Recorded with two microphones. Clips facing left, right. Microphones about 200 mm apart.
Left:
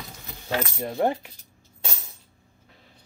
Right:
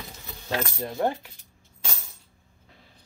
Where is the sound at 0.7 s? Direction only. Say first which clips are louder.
Left 4 dB; 20° left (ahead or behind).